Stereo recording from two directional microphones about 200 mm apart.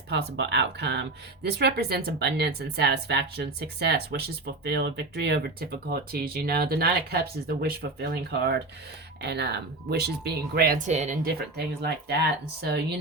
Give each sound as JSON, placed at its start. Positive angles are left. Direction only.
{"t": 0.1, "sound": "speech", "side_deg": -60}